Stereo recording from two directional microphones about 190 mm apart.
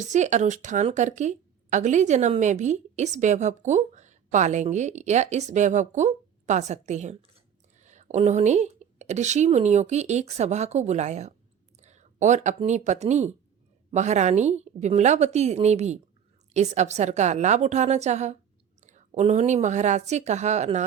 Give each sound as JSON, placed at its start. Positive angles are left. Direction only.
{"t": 0.0, "sound": "a woman's voice", "side_deg": -40}